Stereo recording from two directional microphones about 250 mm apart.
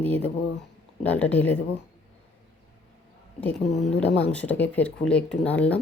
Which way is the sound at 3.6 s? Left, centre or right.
Left.